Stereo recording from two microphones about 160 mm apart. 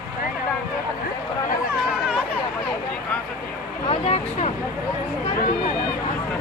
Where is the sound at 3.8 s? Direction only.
40° left (ahead or behind).